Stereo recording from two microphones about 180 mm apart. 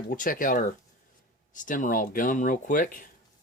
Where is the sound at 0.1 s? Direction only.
50° left (ahead or behind).